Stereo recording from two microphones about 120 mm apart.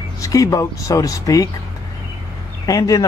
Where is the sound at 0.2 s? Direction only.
30° left (ahead or behind).